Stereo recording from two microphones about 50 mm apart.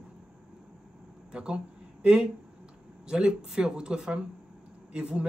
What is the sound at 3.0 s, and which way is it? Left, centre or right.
Speech, centre.